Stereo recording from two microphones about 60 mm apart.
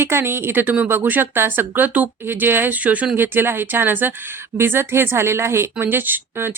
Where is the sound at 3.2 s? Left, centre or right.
Right.